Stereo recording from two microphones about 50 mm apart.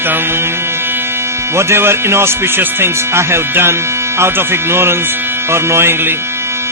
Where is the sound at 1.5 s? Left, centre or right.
Right.